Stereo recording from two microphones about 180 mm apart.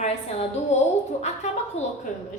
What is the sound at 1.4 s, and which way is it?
Speech, 40° left (ahead or behind).